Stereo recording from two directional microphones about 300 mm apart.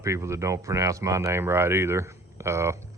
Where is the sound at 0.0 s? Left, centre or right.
Centre.